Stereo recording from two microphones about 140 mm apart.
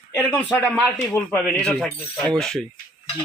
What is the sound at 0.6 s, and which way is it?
Speech, 10° left (ahead or behind).